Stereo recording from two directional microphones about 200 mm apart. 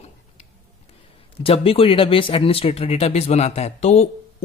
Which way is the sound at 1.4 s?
30° left (ahead or behind).